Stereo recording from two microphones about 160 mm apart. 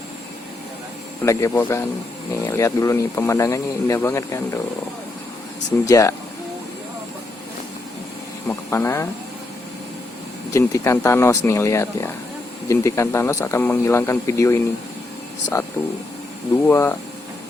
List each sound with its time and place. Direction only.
1.2 s speech: 15° left (ahead or behind)
5.8 s speech: 20° left (ahead or behind)
8.4 s speech: 15° left (ahead or behind)
10.5 s speech: 20° left (ahead or behind)